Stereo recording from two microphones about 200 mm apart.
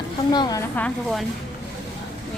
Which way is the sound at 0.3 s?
20° left (ahead or behind).